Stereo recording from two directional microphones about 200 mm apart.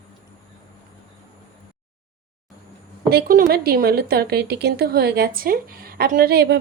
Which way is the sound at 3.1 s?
45° right (ahead or behind).